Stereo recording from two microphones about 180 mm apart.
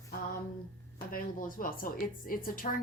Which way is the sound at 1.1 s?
50° left (ahead or behind).